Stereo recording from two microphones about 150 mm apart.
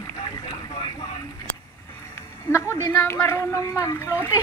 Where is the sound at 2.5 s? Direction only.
20° left (ahead or behind).